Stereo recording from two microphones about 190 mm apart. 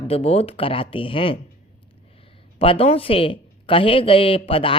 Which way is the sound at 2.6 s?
30° left (ahead or behind).